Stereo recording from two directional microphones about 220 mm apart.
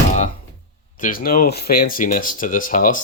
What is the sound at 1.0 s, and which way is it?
Speech, 40° left (ahead or behind).